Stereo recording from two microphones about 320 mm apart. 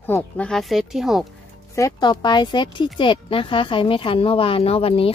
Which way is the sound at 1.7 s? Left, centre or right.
Centre.